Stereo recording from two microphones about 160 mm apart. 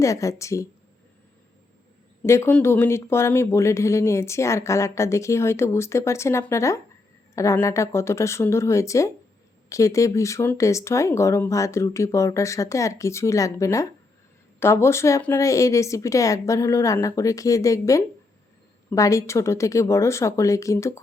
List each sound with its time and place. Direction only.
0.0 s speech: 20° left (ahead or behind)
2.2 s speech: 15° left (ahead or behind)